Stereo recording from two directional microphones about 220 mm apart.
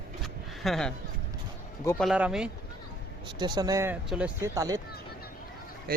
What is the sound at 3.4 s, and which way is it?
A man's voice, 20° right (ahead or behind).